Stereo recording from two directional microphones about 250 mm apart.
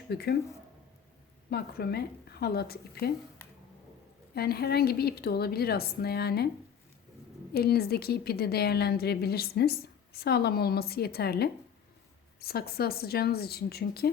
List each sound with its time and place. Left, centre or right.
0.1 s a woman's voice: left
1.5 s a woman's voice: left
4.4 s a woman's voice: left
7.5 s a woman's voice: left